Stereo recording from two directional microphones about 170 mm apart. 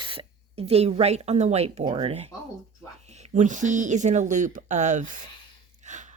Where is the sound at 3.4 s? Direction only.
45° right (ahead or behind).